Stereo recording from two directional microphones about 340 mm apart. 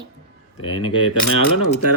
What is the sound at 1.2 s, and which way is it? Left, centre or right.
Speech, left.